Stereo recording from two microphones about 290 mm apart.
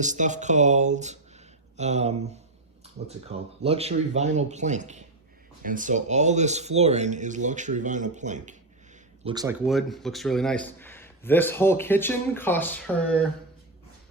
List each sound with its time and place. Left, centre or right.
0.0 s speech: right
3.6 s speech: right
9.2 s speech: centre
9.6 s a man's voice: centre